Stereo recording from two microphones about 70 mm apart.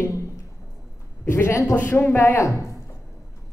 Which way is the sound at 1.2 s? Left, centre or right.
Left.